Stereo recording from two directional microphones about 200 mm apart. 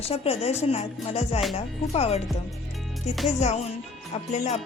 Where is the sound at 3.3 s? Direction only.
35° left (ahead or behind).